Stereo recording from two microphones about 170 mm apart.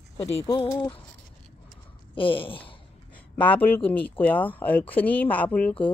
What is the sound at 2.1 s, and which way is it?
Speech, 30° left (ahead or behind).